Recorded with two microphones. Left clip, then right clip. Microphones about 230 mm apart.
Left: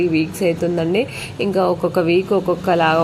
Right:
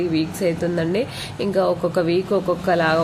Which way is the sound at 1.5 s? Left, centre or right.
Centre.